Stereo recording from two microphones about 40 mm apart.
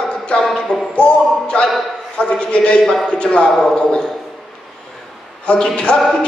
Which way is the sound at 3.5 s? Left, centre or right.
Centre.